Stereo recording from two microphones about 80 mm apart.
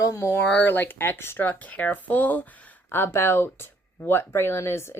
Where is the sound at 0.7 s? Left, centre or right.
Left.